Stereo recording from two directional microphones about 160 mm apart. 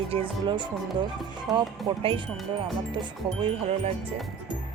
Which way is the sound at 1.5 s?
Centre (ahead or behind).